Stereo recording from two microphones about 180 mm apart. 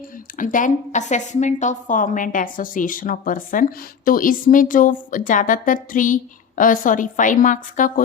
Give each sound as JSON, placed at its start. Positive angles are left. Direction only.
{"t": 0.3, "sound": "a woman's voice", "side_deg": 45}